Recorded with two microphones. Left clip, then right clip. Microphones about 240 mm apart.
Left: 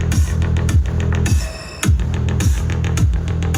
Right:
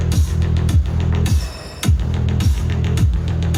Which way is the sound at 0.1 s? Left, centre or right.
Centre.